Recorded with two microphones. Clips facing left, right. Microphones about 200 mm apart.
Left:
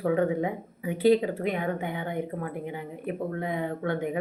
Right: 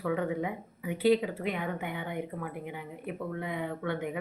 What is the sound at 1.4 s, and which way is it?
Speech, 45° left (ahead or behind).